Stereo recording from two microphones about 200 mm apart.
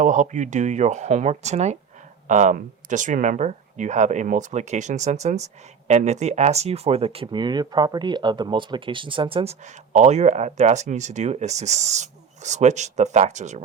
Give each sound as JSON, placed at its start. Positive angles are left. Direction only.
{"t": 0.0, "sound": "speech", "side_deg": -40}